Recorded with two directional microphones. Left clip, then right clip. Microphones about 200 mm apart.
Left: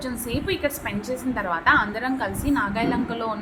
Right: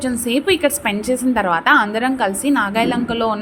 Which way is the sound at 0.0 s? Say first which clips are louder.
Right 10 dB; 40° right (ahead or behind).